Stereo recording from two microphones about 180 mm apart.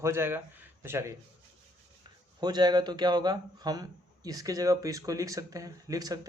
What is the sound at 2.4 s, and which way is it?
Speech, 25° right (ahead or behind).